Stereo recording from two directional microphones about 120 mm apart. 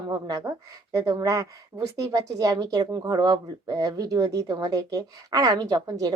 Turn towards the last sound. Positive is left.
turn(degrees=-30)  # may be behind; listen again after turning